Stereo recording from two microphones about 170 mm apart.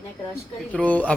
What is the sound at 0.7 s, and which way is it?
Speech, 10° left (ahead or behind).